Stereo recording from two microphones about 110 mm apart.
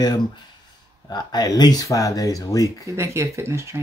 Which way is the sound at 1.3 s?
35° left (ahead or behind).